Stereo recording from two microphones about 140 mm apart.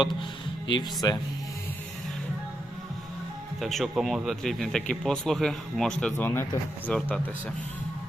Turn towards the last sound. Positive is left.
turn(degrees=10)  # may be behind; listen again after turning